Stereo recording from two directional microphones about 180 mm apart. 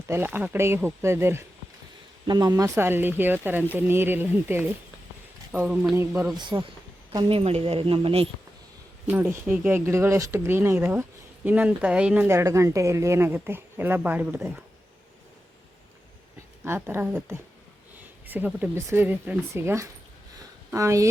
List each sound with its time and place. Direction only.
0.1 s speech: 10° right (ahead or behind)
6.3 s a woman's voice: 25° right (ahead or behind)
9.0 s speech: 10° right (ahead or behind)
16.6 s speech: 15° right (ahead or behind)